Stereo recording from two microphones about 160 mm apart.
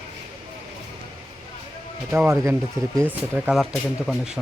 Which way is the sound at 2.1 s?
15° right (ahead or behind).